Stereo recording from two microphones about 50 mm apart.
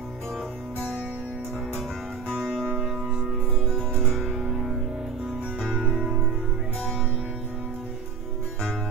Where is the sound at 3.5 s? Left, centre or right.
Centre.